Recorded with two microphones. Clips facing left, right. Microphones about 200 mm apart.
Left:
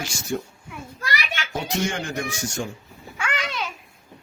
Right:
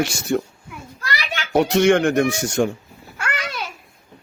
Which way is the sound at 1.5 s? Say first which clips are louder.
Right 12 dB; 70° right (ahead or behind).